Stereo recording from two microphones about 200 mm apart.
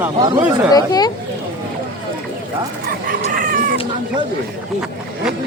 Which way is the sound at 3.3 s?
45° right (ahead or behind).